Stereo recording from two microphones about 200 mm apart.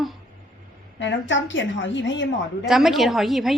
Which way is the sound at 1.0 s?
65° left (ahead or behind).